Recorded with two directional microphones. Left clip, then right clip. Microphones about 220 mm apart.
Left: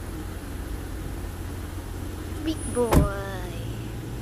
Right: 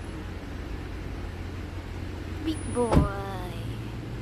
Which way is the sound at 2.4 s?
Centre (ahead or behind).